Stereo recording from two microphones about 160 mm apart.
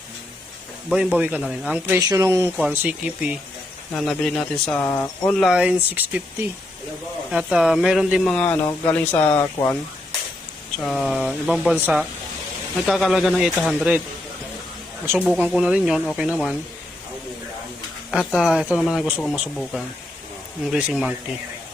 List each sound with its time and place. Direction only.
0.9 s speech: 5° right (ahead or behind)
2.0 s speech: 20° right (ahead or behind)
2.6 s speech: 5° right (ahead or behind); by 9.7 s 15° left (ahead or behind)
10.8 s speech: centre (ahead or behind)
15.2 s speech: 5° right (ahead or behind)
18.1 s speech: 5° right (ahead or behind)